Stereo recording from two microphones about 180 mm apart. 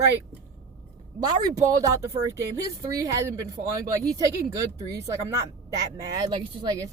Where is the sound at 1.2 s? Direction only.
25° right (ahead or behind).